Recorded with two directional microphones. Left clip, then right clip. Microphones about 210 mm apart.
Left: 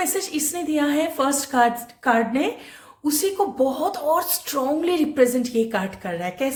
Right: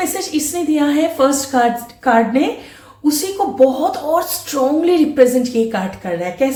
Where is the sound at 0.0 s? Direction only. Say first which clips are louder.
Right 5 dB; 40° left (ahead or behind).